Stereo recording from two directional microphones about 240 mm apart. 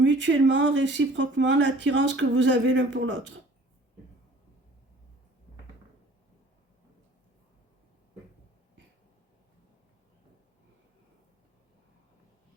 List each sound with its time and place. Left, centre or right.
0.0 s speech: right